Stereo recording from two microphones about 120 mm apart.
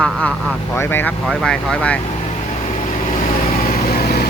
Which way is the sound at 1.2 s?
5° left (ahead or behind).